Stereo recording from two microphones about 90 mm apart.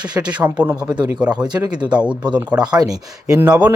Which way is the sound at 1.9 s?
10° right (ahead or behind).